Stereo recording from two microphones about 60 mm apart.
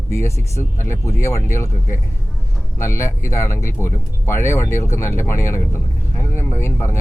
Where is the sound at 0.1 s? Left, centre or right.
Left.